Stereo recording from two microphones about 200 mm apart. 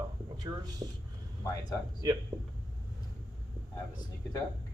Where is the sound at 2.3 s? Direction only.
10° right (ahead or behind).